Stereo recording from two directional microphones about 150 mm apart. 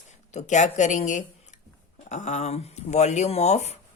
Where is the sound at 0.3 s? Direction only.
50° left (ahead or behind).